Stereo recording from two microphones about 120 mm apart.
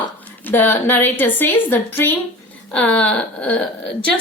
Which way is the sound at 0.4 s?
15° left (ahead or behind).